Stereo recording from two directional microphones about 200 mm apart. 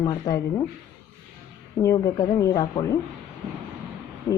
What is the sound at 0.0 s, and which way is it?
Speech, 20° left (ahead or behind).